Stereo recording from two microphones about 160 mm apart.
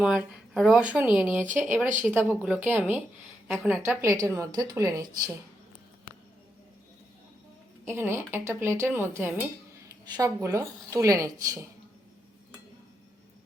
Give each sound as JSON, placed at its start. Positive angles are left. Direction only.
{"t": 0.0, "sound": "a woman's voice", "side_deg": -5}
{"t": 3.8, "sound": "speech", "side_deg": -20}
{"t": 7.9, "sound": "speech", "side_deg": -15}